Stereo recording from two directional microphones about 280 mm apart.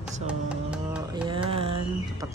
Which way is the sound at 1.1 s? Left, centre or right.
Centre.